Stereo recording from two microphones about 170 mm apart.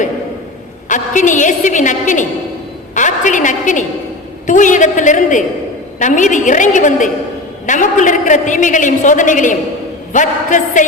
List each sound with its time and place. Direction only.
0.9 s a woman's voice: 50° left (ahead or behind)